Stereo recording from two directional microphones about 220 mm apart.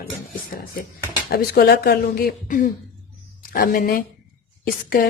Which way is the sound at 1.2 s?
45° left (ahead or behind).